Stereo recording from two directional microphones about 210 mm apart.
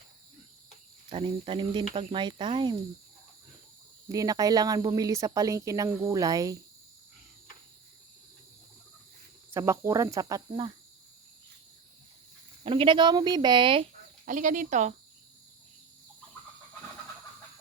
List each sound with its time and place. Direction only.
1.1 s speech: 25° right (ahead or behind)
4.1 s speech: 15° right (ahead or behind)
9.5 s speech: 15° right (ahead or behind)
12.6 s speech: 25° right (ahead or behind)
14.3 s speech: 40° right (ahead or behind)